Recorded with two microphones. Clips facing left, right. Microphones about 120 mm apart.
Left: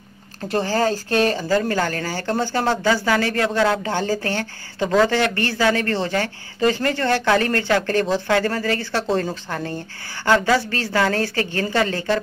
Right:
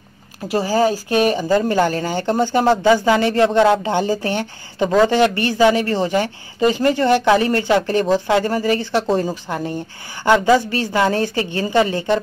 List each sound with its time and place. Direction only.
0.5 s speech: 10° right (ahead or behind)